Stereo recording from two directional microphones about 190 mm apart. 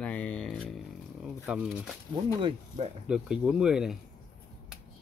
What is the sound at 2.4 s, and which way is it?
Speech, 30° right (ahead or behind).